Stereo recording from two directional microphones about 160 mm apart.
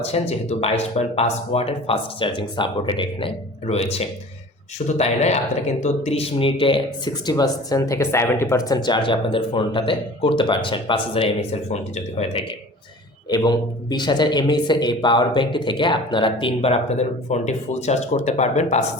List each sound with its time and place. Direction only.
0.0 s speech: 40° left (ahead or behind)
13.3 s speech: 25° left (ahead or behind); by 18.9 s 45° left (ahead or behind)